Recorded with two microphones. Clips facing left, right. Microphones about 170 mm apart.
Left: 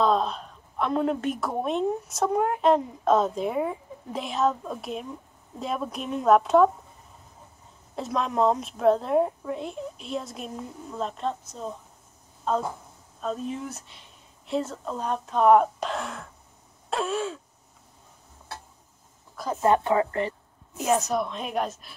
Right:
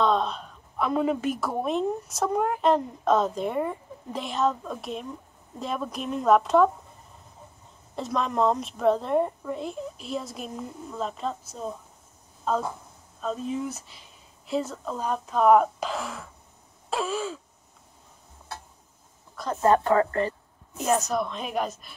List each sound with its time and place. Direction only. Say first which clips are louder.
0.0 s a woman's voice: left 1 dB; centre (ahead or behind)
7.9 s a woman's voice: even; centre (ahead or behind)
19.3 s a woman's voice: even; 5° left (ahead or behind)
19.6 s a woman's voice: right 1 dB; 15° left (ahead or behind)
20.8 s a woman's voice: left 1 dB; 5° left (ahead or behind)